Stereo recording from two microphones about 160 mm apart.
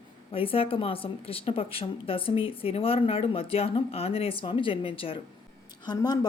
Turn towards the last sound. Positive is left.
turn(degrees=25)  # may be behind; listen again after turning